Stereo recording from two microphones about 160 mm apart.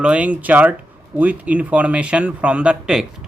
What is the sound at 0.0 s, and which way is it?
Speech, 10° right (ahead or behind).